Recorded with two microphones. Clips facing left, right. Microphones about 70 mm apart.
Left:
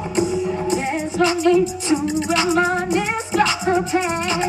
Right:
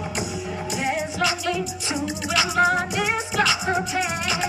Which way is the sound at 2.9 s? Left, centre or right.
Left.